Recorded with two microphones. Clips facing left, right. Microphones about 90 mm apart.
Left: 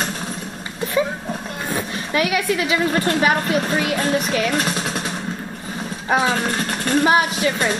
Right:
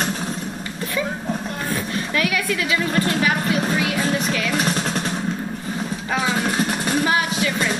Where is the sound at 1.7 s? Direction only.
10° left (ahead or behind).